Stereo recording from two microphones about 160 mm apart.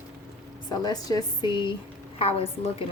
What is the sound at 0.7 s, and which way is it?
Speech, 25° left (ahead or behind).